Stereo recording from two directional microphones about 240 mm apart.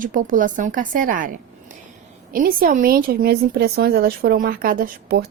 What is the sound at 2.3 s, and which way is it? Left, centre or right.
A woman's voice, right.